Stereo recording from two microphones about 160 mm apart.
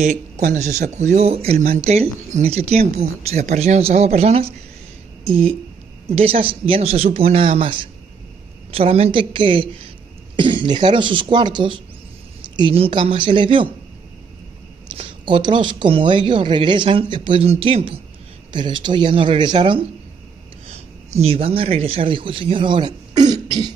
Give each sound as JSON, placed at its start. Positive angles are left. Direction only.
{"t": 0.0, "sound": "speech", "side_deg": -45}
{"t": 15.0, "sound": "speech", "side_deg": -30}